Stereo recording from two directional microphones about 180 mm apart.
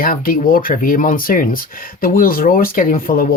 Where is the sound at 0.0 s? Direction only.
50° left (ahead or behind).